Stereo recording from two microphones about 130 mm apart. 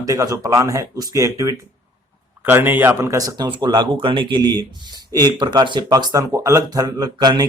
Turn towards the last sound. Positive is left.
turn(degrees=-35)  # may be behind; listen again after turning